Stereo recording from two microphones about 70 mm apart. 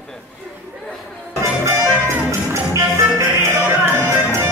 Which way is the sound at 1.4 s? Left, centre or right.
Right.